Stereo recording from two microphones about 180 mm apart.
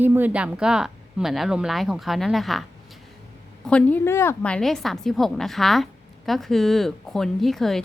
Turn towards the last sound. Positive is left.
turn(degrees=0)  # may be behind; listen again after turning